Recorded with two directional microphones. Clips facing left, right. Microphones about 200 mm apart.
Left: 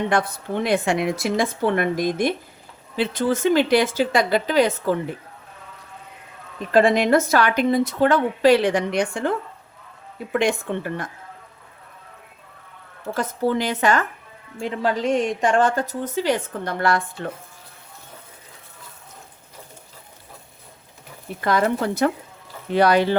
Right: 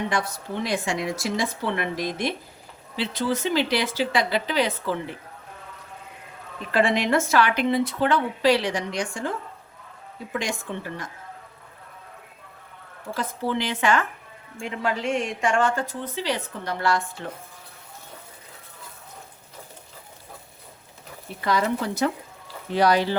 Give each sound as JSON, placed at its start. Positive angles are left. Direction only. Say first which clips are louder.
{"t": 0.1, "sound": "a woman's voice", "louder": "left 5 dB", "side_deg": 55}
{"t": 6.7, "sound": "speech", "louder": "left 5 dB", "side_deg": 40}
{"t": 10.3, "sound": "a woman's voice", "louder": "left 8 dB", "side_deg": 60}
{"t": 13.1, "sound": "a woman's voice", "louder": "left 5 dB", "side_deg": 45}
{"t": 21.4, "sound": "a woman's voice", "louder": "left 3 dB", "side_deg": 55}